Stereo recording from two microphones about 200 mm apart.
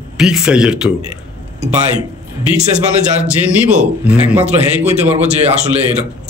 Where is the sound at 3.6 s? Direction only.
5° right (ahead or behind).